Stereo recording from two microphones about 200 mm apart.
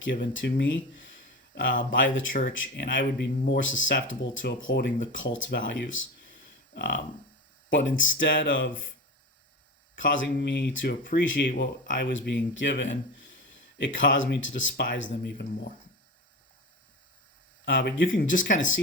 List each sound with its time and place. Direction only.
0.0 s speech: 65° left (ahead or behind)
9.9 s speech: 65° left (ahead or behind)
17.7 s speech: 65° left (ahead or behind)
18.1 s speech: 40° left (ahead or behind)
18.4 s speech: 70° left (ahead or behind)